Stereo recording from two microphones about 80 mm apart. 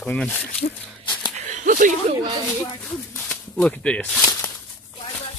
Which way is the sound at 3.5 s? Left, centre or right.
Centre.